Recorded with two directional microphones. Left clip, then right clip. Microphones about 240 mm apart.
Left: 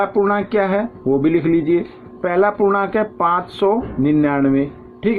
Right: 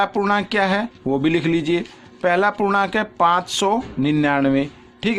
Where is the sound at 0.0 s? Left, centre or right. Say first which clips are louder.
Left 2 dB; right.